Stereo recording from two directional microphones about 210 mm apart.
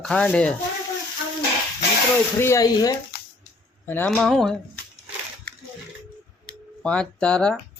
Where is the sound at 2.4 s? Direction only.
15° left (ahead or behind).